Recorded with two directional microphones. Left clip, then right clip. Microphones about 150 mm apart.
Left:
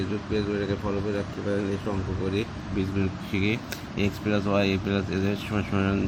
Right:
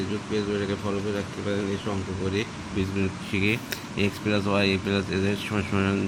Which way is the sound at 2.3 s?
Centre (ahead or behind).